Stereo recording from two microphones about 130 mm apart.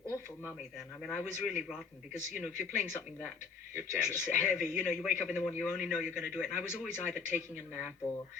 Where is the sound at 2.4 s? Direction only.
15° left (ahead or behind).